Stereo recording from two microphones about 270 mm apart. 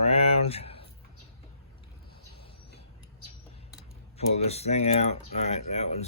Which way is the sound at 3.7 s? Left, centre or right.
Left.